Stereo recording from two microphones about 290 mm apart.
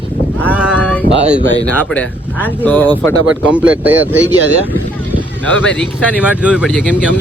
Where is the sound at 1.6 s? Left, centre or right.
Centre.